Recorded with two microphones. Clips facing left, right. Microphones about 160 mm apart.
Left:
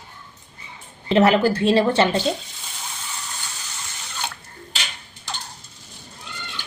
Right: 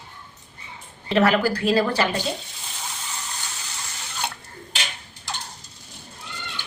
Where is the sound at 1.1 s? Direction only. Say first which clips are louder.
Left 3 dB; 20° left (ahead or behind).